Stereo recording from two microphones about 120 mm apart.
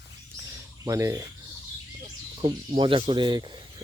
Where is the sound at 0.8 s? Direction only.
25° right (ahead or behind).